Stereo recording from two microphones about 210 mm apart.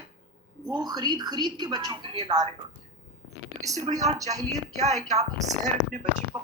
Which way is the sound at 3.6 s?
15° right (ahead or behind).